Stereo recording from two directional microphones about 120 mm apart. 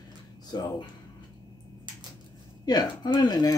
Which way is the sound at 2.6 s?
35° left (ahead or behind).